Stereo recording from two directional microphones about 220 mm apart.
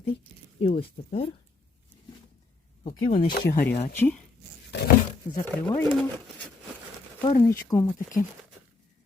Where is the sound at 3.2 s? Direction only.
40° left (ahead or behind).